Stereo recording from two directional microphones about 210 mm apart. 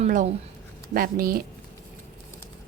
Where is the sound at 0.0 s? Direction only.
35° right (ahead or behind).